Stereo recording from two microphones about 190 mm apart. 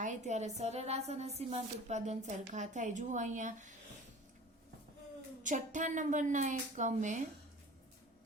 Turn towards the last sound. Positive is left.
turn(degrees=-40)  # may be behind; listen again after turning